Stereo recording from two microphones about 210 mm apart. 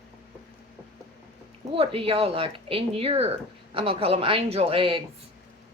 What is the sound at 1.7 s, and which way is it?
Speech, 25° right (ahead or behind).